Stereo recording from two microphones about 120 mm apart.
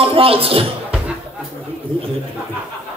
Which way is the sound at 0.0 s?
50° right (ahead or behind).